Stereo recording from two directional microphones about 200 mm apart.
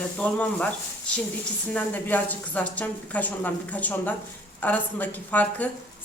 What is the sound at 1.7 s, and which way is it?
Speech, 10° left (ahead or behind).